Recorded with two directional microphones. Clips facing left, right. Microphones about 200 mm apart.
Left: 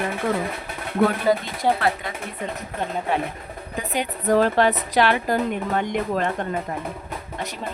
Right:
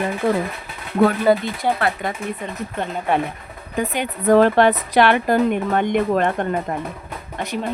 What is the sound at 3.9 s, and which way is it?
Speech, 60° right (ahead or behind).